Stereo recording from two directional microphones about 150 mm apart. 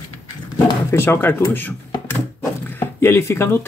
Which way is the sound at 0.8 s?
15° left (ahead or behind).